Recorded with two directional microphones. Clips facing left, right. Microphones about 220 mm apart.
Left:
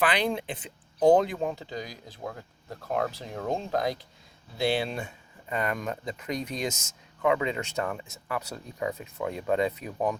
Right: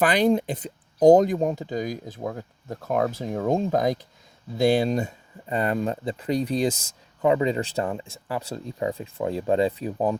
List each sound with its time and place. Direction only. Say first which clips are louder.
0.0 s speech: right 7 dB; 45° right (ahead or behind)